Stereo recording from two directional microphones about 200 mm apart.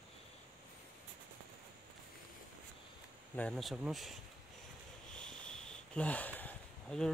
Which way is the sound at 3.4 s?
Centre (ahead or behind).